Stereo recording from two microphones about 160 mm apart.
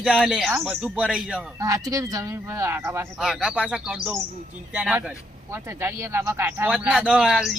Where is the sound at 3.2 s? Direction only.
5° right (ahead or behind).